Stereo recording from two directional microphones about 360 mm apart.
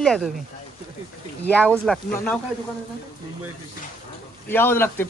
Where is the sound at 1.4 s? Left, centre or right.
Centre.